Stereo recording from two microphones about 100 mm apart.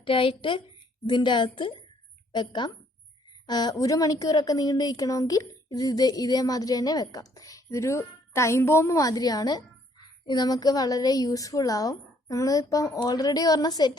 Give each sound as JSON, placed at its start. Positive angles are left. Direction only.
{"t": 0.0, "sound": "a woman's voice", "side_deg": 60}